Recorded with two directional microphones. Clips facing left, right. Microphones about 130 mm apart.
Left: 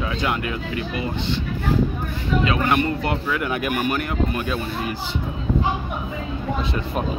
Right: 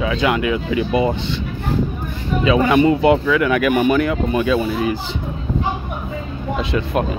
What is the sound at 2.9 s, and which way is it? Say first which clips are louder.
Speech: right 10 dB; 90° right.